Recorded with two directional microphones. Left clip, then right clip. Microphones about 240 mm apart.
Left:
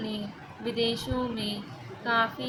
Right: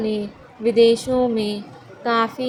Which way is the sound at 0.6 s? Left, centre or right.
Right.